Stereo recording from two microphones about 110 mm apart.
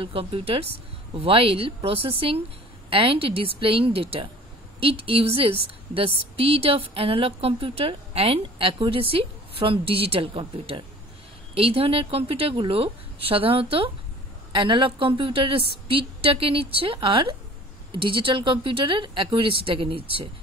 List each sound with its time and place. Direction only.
0.0 s speech: 55° right (ahead or behind)
14.5 s a woman's voice: 45° right (ahead or behind)